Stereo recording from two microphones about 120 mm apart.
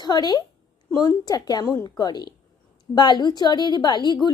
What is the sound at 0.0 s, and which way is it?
A woman's voice, 35° left (ahead or behind).